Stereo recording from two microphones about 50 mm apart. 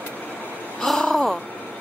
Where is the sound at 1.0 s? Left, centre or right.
Centre.